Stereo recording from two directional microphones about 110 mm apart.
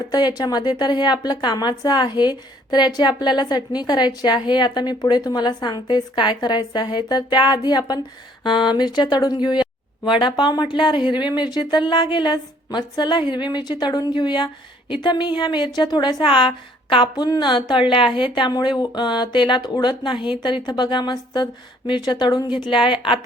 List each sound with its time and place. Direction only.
0.1 s a woman's voice: 35° left (ahead or behind)